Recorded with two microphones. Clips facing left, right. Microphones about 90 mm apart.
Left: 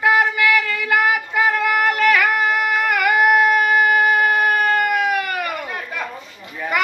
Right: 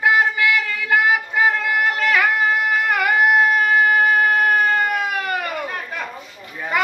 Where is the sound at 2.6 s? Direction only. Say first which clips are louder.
Left 1 dB; 25° right (ahead or behind).